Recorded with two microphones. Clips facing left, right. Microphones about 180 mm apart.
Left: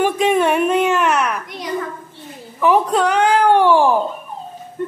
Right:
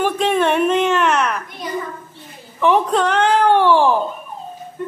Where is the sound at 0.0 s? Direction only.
10° left (ahead or behind).